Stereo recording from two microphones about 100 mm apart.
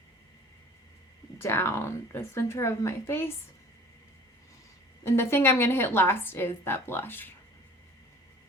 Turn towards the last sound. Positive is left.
turn(degrees=20)  # may be behind; listen again after turning